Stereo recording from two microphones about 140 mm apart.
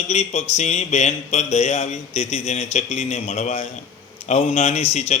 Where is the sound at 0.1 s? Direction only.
55° left (ahead or behind).